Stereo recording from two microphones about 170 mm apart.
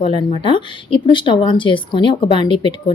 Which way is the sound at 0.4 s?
30° left (ahead or behind).